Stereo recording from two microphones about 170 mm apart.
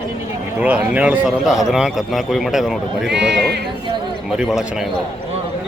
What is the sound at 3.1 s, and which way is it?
Speech, 85° right.